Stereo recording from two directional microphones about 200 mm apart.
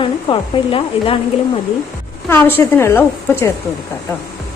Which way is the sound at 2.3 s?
10° left (ahead or behind).